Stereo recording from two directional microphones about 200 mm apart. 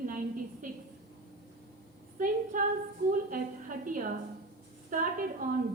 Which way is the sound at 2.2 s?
40° right (ahead or behind).